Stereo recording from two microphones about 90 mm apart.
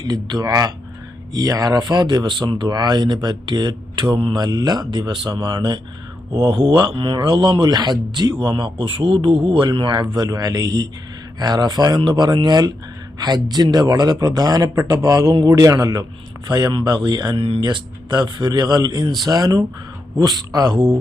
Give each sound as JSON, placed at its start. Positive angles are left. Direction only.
{"t": 0.0, "sound": "a man's voice", "side_deg": -50}
{"t": 5.4, "sound": "speech", "side_deg": -45}
{"t": 6.5, "sound": "a man's voice", "side_deg": -70}
{"t": 9.9, "sound": "a man's voice", "side_deg": -55}
{"t": 10.2, "sound": "a man's voice", "side_deg": -45}
{"t": 16.5, "sound": "a man's voice", "side_deg": -55}
{"t": 17.4, "sound": "speech", "side_deg": -75}